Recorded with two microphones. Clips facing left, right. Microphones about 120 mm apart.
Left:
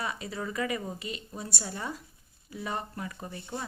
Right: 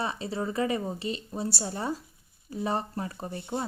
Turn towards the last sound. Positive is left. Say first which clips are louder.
# right 4 dB
turn(degrees=-30)  # may be behind; listen again after turning